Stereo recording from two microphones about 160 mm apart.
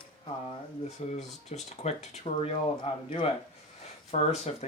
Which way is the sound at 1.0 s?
45° left (ahead or behind).